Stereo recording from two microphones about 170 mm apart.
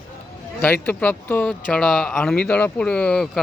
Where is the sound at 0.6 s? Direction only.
10° left (ahead or behind).